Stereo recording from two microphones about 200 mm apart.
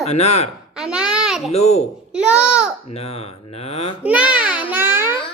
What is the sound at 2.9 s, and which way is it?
Speech, 30° left (ahead or behind).